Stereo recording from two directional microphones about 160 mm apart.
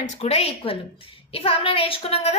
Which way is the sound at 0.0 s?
40° left (ahead or behind).